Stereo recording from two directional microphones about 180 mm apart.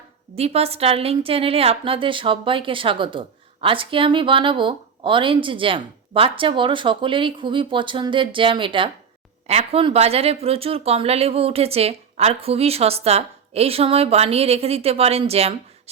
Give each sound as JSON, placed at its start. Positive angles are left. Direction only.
{"t": 0.3, "sound": "a woman's voice", "side_deg": -35}